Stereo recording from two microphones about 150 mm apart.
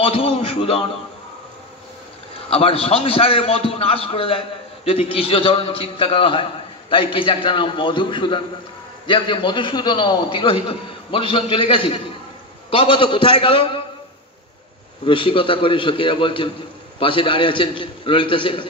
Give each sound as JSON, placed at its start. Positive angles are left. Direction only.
{"t": 0.0, "sound": "a man's voice", "side_deg": 40}
{"t": 2.3, "sound": "a man's voice", "side_deg": 40}
{"t": 15.0, "sound": "a man's voice", "side_deg": 35}